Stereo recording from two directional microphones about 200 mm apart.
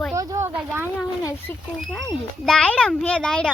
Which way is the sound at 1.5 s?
10° left (ahead or behind).